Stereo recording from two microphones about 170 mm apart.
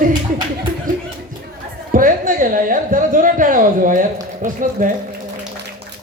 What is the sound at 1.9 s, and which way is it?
A woman's voice, 55° right (ahead or behind).